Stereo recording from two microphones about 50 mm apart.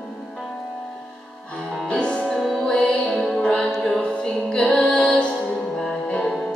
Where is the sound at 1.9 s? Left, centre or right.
Centre.